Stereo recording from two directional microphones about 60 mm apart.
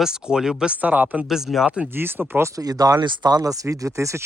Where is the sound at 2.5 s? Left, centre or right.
Right.